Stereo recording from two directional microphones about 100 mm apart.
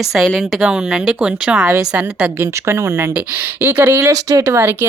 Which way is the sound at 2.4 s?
30° right (ahead or behind).